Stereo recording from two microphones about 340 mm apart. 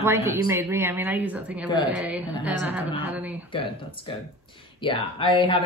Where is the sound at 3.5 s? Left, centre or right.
Centre.